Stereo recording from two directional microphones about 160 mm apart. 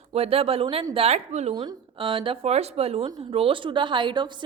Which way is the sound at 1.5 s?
30° right (ahead or behind).